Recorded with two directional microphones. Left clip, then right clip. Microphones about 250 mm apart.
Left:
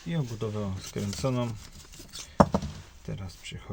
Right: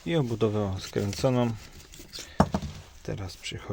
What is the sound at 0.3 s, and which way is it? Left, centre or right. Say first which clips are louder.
Speech: right 7 dB; right.